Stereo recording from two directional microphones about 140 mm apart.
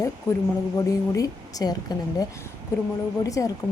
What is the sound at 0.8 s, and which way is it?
A woman's voice, 25° left (ahead or behind).